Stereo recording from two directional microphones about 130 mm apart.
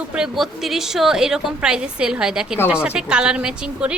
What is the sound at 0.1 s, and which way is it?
A woman's voice, 5° right (ahead or behind).